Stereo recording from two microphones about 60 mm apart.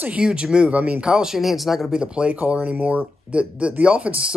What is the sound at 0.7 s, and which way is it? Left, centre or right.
Speech, right.